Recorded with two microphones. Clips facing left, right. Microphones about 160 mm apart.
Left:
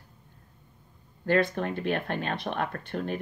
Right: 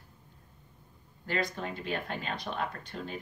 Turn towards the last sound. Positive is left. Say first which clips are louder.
# left 7 dB
turn(degrees=60)  # may be behind; listen again after turning